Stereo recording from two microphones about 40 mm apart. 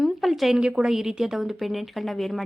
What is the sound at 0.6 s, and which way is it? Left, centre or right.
A woman's voice, centre.